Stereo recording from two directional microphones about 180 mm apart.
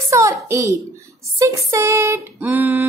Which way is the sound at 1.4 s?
20° right (ahead or behind).